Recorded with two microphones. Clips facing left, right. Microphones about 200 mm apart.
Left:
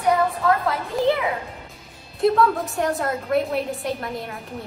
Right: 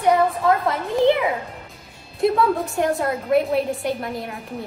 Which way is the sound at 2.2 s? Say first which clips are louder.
Even; centre (ahead or behind).